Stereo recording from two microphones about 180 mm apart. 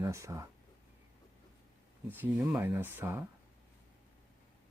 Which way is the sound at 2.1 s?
10° right (ahead or behind).